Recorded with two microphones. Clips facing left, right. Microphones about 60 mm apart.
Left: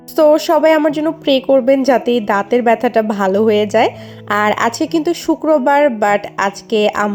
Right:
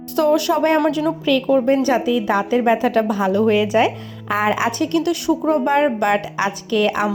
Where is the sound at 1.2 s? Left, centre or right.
Left.